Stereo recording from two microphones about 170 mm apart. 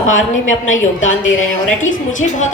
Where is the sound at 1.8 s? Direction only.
45° left (ahead or behind).